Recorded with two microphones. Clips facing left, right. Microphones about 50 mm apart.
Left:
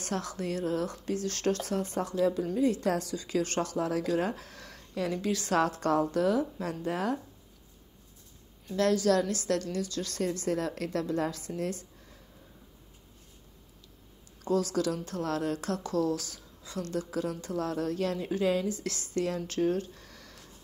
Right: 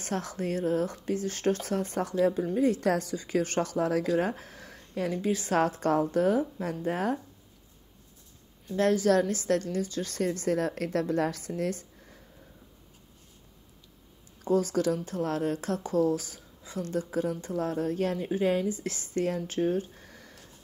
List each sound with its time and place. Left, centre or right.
0.0 s a woman's voice: right
8.7 s a woman's voice: right
14.4 s a woman's voice: right
19.4 s speech: centre